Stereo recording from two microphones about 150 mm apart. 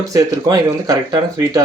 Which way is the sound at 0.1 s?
25° right (ahead or behind).